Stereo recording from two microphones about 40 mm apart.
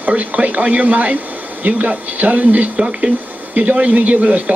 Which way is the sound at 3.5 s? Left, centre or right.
Right.